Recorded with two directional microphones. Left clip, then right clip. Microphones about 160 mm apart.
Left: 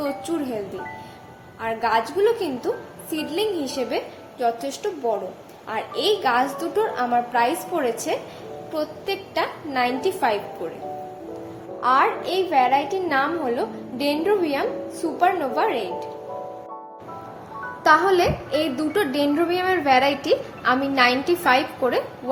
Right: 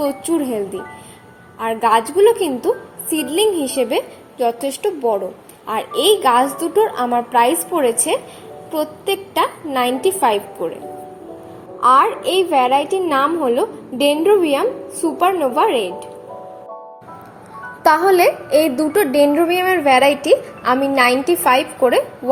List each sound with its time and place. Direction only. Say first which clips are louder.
0.0 s a child's voice: right 7 dB; 35° right (ahead or behind)
11.8 s a child's voice: right 6 dB; 35° right (ahead or behind)
17.8 s a child's voice: right 5 dB; 50° right (ahead or behind); by 22.0 s 30° right (ahead or behind)